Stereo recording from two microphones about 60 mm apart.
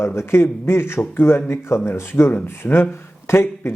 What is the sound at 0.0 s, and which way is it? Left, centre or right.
A man's voice, left.